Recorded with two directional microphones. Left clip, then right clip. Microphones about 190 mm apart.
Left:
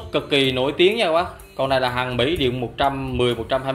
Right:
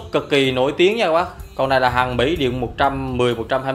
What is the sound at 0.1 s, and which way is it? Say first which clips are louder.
Speech: right 2 dB; 10° right (ahead or behind).